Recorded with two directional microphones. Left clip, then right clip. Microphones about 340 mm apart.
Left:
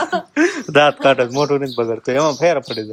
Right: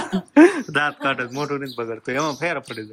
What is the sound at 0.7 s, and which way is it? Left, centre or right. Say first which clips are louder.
A man's voice: left 9 dB; centre.